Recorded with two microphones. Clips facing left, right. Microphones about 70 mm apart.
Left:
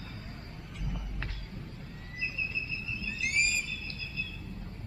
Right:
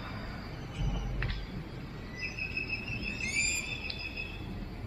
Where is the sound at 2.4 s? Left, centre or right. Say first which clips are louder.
Left 2 dB; right.